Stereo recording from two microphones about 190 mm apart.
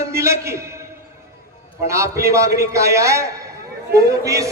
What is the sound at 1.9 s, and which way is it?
A man's voice, 15° right (ahead or behind).